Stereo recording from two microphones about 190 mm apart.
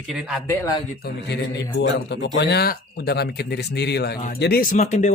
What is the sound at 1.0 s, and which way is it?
Speech, 60° left (ahead or behind).